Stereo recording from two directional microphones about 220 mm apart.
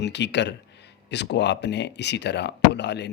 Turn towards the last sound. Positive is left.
turn(degrees=50)  # may be behind; listen again after turning